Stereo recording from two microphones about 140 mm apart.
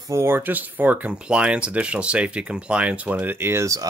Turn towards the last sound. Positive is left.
turn(degrees=-20)  # may be behind; listen again after turning